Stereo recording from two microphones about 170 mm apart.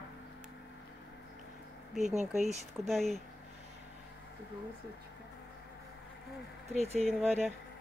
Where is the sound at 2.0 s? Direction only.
45° right (ahead or behind).